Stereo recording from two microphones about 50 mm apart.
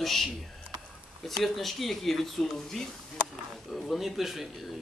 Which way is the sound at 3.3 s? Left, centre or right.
Centre.